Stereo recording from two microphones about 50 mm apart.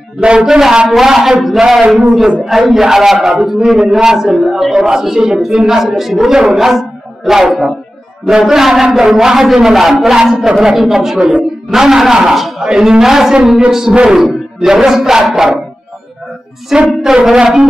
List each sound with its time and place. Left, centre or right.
0.2 s a man's voice: centre
0.6 s a woman's voice: centre
14.2 s a sound: centre
15.2 s a man's voice: centre
16.7 s a woman's voice: centre